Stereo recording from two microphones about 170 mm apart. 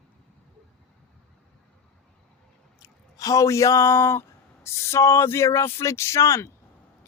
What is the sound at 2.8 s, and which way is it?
A man's voice, 20° left (ahead or behind).